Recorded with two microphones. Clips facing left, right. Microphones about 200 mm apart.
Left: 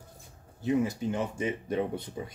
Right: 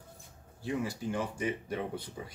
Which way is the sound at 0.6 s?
20° left (ahead or behind).